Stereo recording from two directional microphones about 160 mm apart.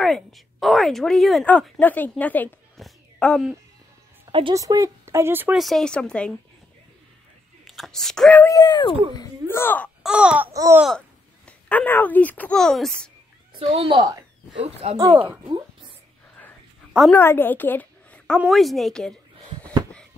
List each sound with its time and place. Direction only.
0.0 s a woman's voice: centre (ahead or behind)
2.8 s a sound: 5° left (ahead or behind)
4.3 s speech: 30° right (ahead or behind)
4.6 s speech: 20° right (ahead or behind)
5.6 s a woman's voice: centre (ahead or behind)
7.6 s speech: centre (ahead or behind)
8.5 s speech: 25° left (ahead or behind)
10.0 s speech: 5° right (ahead or behind)
10.5 s babbling: 20° right (ahead or behind)
10.8 s speech: 5° left (ahead or behind)
13.6 s a woman's voice: 35° right (ahead or behind)
17.1 s a woman's voice: 15° left (ahead or behind)